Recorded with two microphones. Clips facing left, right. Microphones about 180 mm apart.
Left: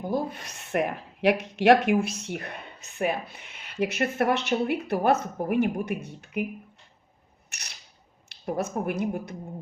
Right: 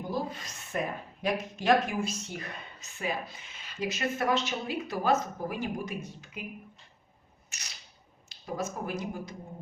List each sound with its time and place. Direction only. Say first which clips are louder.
0.1 s speech: left 5 dB; 60° left (ahead or behind)
7.5 s a sound: left 3 dB; 65° left (ahead or behind)
8.3 s speech: left 6 dB; 65° left (ahead or behind)